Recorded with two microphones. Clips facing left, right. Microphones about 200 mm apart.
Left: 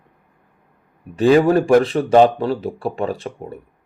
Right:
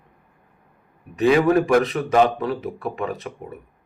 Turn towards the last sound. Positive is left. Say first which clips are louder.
# left 4 dB
turn(degrees=30)  # may be behind; listen again after turning